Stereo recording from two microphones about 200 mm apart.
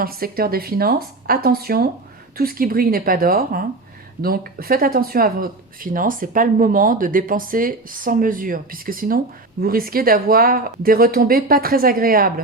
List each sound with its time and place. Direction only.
0.0 s speech: 45° right (ahead or behind)